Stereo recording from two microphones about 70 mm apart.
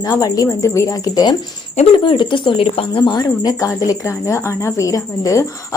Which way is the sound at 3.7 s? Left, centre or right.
Left.